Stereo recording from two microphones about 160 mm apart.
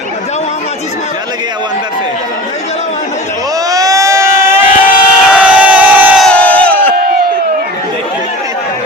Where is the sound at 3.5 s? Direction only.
20° right (ahead or behind).